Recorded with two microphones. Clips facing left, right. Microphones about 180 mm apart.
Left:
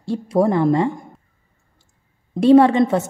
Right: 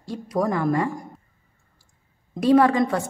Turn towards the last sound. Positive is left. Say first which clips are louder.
# left 5 dB
turn(degrees=25)  # may be behind; listen again after turning